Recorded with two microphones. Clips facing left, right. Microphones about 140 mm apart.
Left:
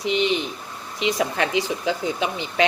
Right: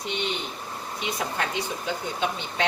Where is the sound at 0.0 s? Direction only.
90° left.